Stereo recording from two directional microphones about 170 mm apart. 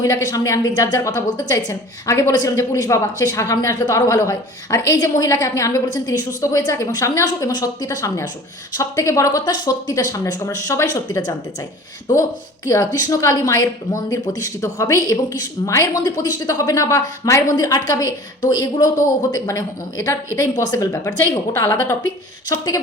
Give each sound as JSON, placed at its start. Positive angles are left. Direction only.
{"t": 0.0, "sound": "a woman's voice", "side_deg": 20}
{"t": 12.6, "sound": "a woman's voice", "side_deg": 20}